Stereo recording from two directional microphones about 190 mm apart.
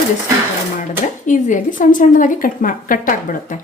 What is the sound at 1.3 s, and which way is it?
Speech, 45° left (ahead or behind).